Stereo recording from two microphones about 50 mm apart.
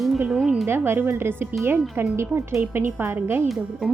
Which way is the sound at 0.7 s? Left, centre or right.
Right.